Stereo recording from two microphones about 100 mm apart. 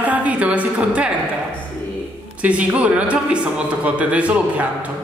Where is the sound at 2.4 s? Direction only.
15° right (ahead or behind).